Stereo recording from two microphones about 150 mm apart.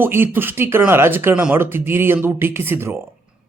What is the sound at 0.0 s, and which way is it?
Speech, 15° right (ahead or behind).